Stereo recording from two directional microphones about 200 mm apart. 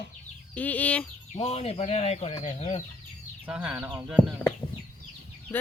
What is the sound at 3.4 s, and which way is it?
Speech, 5° right (ahead or behind).